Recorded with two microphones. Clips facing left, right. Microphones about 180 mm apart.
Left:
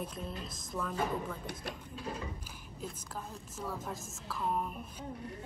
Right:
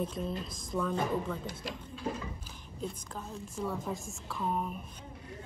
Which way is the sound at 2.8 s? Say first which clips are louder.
Right 3 dB; 5° left (ahead or behind).